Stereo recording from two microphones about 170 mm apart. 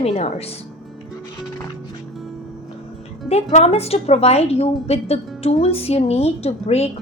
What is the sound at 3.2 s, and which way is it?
A woman's voice, 40° left (ahead or behind).